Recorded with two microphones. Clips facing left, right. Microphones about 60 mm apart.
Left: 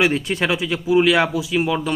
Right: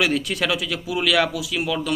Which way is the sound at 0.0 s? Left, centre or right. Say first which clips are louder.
Left 3 dB; left.